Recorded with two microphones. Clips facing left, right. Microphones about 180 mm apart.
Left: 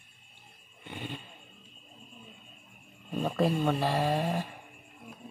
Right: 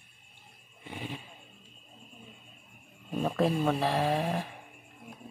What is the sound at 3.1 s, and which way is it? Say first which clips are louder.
Speech: even; 5° right (ahead or behind).